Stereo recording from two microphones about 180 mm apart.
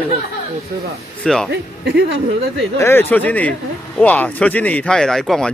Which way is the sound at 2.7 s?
15° left (ahead or behind).